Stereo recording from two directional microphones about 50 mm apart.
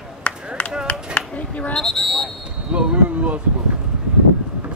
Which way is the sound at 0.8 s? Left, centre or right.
Left.